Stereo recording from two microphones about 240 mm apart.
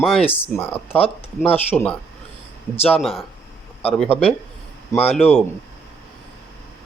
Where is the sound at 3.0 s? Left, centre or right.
Centre.